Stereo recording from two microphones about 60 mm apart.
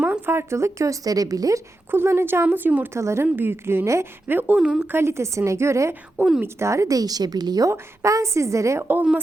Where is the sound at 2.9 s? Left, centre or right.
Right.